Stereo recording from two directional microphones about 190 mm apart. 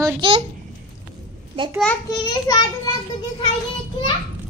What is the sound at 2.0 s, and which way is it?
Speech, 20° left (ahead or behind).